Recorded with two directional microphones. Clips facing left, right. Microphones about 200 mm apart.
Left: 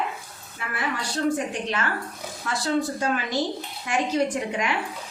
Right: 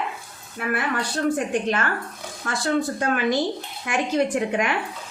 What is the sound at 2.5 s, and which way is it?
A woman's voice, 55° right (ahead or behind).